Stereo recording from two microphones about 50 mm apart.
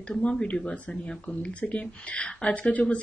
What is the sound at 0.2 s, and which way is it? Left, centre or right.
Speech, left.